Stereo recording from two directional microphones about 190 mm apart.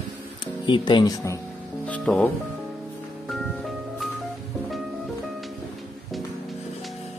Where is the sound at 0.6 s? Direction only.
25° left (ahead or behind).